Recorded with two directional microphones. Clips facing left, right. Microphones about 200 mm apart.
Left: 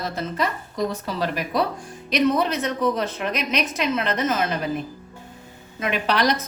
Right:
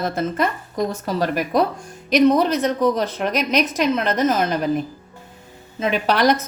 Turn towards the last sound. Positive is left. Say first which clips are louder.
# right 4 dB
turn(degrees=-50)  # may be behind; listen again after turning